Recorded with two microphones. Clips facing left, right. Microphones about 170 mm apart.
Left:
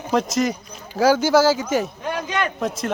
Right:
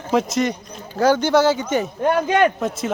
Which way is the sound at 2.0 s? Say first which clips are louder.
Right 8 dB; 55° right (ahead or behind).